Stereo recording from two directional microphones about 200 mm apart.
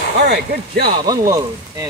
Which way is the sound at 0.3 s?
50° right (ahead or behind).